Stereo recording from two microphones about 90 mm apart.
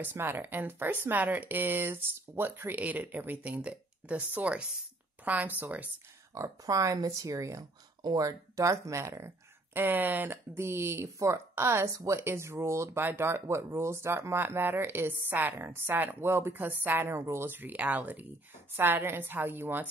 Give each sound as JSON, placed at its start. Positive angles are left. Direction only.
{"t": 0.0, "sound": "speech", "side_deg": -25}
{"t": 6.3, "sound": "speech", "side_deg": -40}
{"t": 9.8, "sound": "speech", "side_deg": -20}